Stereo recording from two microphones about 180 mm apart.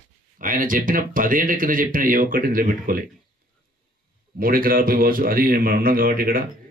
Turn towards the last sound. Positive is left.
turn(degrees=-50)  # may be behind; listen again after turning